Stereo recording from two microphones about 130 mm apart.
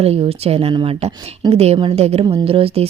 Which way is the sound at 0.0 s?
50° right (ahead or behind).